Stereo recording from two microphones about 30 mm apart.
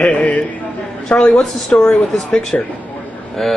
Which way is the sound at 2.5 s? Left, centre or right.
Left.